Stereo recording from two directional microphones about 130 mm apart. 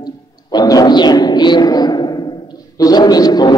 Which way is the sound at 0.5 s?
30° left (ahead or behind).